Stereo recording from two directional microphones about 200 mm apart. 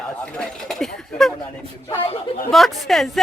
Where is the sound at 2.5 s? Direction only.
Centre (ahead or behind).